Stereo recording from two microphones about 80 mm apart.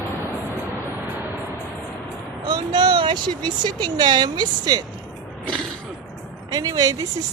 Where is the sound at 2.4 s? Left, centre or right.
Right.